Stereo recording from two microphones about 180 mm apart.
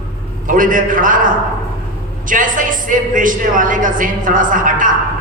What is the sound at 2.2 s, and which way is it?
A man's voice, 45° right (ahead or behind).